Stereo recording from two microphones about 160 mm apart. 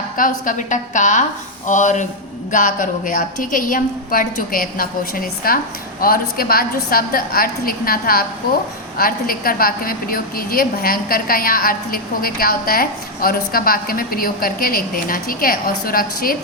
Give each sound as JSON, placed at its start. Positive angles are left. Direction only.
{"t": 0.2, "sound": "a woman's voice", "side_deg": 55}